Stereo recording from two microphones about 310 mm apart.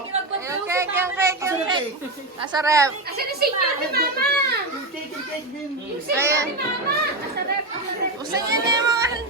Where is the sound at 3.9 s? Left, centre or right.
Right.